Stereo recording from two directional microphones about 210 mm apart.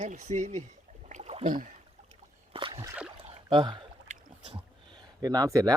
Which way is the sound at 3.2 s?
25° right (ahead or behind).